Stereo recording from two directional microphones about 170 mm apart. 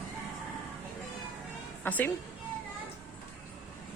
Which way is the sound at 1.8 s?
10° left (ahead or behind).